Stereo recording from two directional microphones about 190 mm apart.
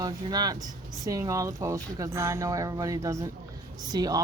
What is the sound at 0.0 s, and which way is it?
A woman's voice, 20° right (ahead or behind).